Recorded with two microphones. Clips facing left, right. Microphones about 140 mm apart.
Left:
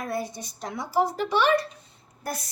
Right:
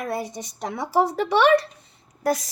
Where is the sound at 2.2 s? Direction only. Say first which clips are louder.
Right 10 dB; 90° right.